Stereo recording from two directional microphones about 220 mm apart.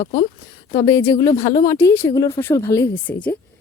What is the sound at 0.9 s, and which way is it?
Speech, 15° left (ahead or behind).